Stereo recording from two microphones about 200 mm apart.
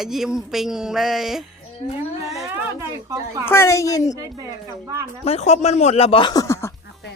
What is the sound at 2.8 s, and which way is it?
Speech, 15° right (ahead or behind).